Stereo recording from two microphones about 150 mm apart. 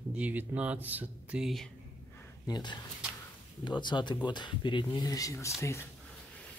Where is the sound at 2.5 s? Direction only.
30° left (ahead or behind).